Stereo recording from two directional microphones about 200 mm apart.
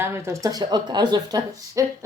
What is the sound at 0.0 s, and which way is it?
Speech, 10° right (ahead or behind).